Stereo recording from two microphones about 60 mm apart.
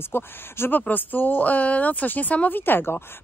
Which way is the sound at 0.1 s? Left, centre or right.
Left.